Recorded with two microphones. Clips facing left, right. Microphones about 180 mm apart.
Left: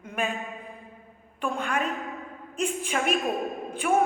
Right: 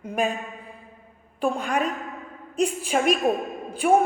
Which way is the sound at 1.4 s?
35° right (ahead or behind).